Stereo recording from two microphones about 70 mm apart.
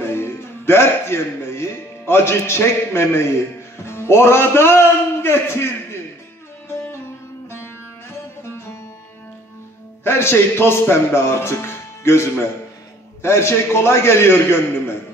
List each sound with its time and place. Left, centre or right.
0.0 s a man's voice: left
7.4 s music: left
10.0 s a man's voice: left